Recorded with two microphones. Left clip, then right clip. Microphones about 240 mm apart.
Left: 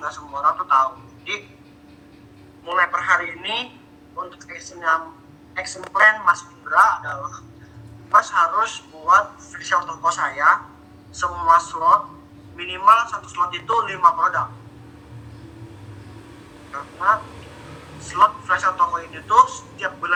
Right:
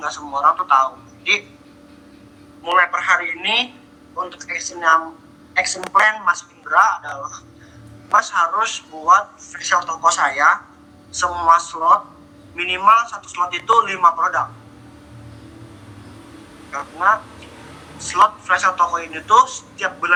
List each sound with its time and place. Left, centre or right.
0.0 s a man's voice: right
2.6 s a man's voice: right
16.7 s a man's voice: right